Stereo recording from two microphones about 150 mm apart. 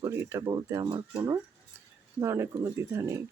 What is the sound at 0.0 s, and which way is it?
Speech, 20° right (ahead or behind).